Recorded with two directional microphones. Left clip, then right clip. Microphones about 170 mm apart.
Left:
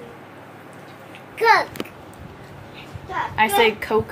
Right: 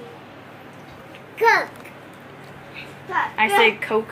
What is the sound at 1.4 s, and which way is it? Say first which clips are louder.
Speech: left 1 dB; 5° left (ahead or behind).